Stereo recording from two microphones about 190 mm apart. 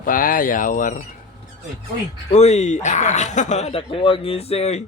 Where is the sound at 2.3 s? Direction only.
35° left (ahead or behind).